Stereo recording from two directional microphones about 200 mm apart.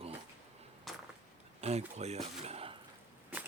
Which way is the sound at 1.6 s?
30° right (ahead or behind).